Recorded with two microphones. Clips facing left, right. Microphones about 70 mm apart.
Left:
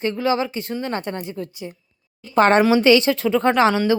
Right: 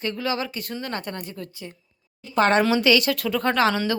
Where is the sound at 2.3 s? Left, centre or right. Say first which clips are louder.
Left 4 dB; left.